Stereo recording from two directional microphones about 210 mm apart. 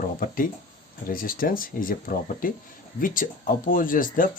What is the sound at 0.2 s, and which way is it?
Speech, 40° left (ahead or behind).